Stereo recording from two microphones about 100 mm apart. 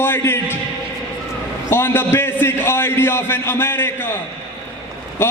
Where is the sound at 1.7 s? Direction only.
25° left (ahead or behind).